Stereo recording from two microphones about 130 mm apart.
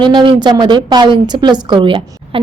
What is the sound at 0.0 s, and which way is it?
A woman's voice, 35° right (ahead or behind).